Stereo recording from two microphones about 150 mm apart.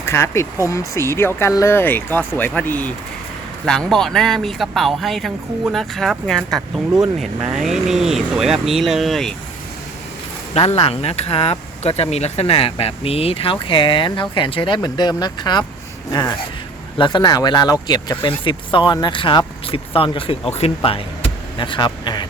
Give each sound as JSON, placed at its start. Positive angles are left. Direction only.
{"t": 0.0, "sound": "speech", "side_deg": 20}
{"t": 10.5, "sound": "speech", "side_deg": 40}
{"t": 17.0, "sound": "speech", "side_deg": 30}